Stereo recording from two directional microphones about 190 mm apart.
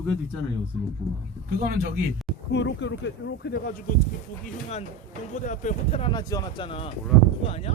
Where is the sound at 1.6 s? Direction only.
50° right (ahead or behind).